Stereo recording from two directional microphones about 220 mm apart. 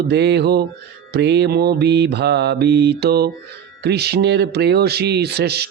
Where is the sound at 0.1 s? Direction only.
50° right (ahead or behind).